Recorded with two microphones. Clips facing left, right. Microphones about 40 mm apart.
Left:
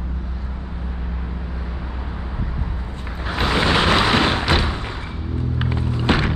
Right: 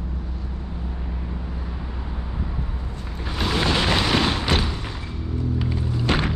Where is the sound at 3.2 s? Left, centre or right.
Left.